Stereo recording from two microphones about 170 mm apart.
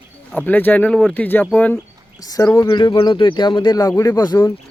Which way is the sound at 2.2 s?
20° left (ahead or behind).